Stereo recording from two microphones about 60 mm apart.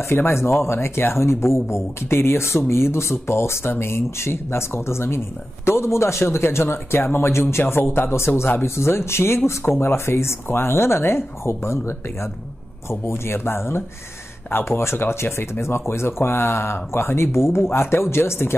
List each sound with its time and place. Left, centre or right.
0.1 s speech: left